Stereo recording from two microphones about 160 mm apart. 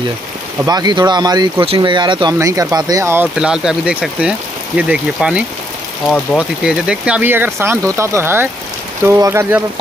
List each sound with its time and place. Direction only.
0.7 s speech: 25° right (ahead or behind)
3.3 s speech: 5° right (ahead or behind)